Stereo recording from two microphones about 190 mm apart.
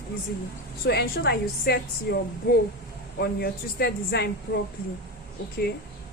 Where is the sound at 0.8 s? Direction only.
60° left (ahead or behind).